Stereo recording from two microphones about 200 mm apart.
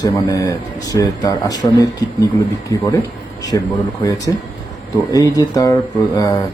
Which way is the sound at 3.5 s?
20° left (ahead or behind).